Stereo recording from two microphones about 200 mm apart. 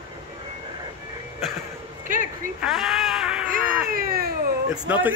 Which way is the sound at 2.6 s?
Centre (ahead or behind).